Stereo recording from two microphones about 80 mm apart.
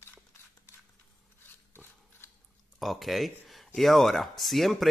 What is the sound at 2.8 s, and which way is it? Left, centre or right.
Speech, centre.